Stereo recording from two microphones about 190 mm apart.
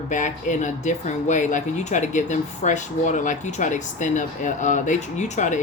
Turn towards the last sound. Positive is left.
turn(degrees=40)  # may be behind; listen again after turning